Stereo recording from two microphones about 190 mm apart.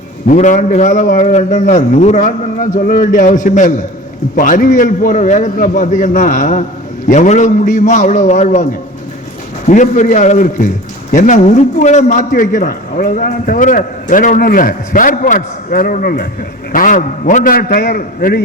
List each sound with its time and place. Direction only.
0.3 s a man's voice: 40° left (ahead or behind)
9.6 s a man's voice: 40° left (ahead or behind)